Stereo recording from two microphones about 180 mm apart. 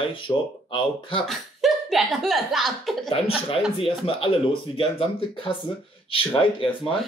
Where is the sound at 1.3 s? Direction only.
Centre (ahead or behind).